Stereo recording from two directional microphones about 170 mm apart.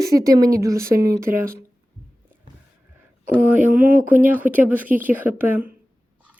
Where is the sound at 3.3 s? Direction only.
10° right (ahead or behind).